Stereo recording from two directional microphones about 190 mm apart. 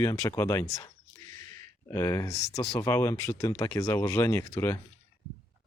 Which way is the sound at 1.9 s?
15° left (ahead or behind).